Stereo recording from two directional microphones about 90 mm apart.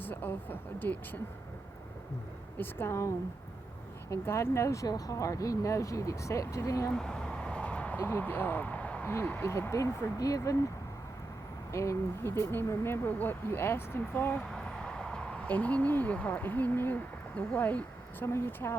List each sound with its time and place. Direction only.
0.0 s speech: 20° left (ahead or behind)
2.6 s speech: 25° left (ahead or behind)
4.1 s speech: 30° left (ahead or behind)
6.9 s a sound: 5° left (ahead or behind)
9.1 s speech: 25° left (ahead or behind)
11.7 s speech: 35° left (ahead or behind)
14.5 s speech: 10° left (ahead or behind); by 18.8 s 25° left (ahead or behind)